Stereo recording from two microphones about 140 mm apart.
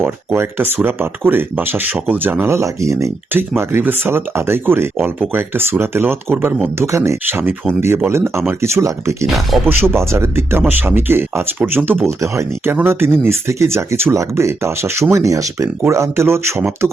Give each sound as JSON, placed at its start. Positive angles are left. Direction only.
{"t": 0.0, "sound": "speech", "side_deg": -15}
{"t": 9.2, "sound": "speech", "side_deg": 0}
{"t": 9.6, "sound": "speech", "side_deg": -15}